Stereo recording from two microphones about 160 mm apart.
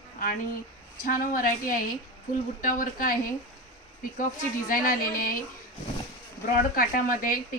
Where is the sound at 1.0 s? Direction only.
60° left (ahead or behind).